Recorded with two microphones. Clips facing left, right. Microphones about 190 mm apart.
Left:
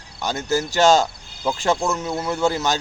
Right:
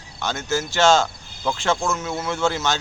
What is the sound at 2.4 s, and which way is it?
Speech, 35° left (ahead or behind).